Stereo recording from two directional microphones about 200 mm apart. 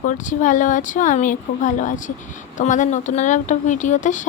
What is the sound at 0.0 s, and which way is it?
Speech, 40° left (ahead or behind).